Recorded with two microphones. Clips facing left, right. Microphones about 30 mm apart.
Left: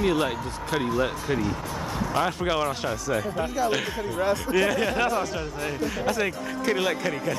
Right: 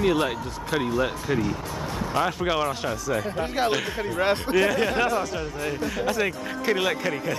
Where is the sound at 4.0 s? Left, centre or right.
Right.